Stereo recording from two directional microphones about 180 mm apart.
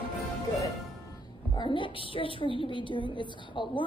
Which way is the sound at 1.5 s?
25° left (ahead or behind).